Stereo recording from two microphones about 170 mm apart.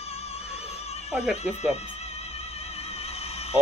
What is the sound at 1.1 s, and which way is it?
Speech, 5° right (ahead or behind).